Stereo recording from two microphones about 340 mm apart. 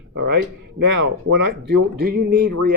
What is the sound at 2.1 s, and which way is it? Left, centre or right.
Speech, right.